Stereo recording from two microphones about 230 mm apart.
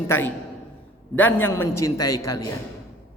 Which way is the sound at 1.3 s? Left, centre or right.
Centre.